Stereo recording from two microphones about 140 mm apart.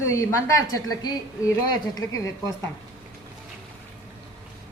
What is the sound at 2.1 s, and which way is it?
Speech, 25° left (ahead or behind).